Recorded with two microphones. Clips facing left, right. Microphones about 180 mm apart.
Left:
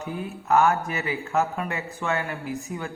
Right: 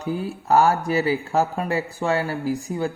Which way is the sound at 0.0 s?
35° right (ahead or behind).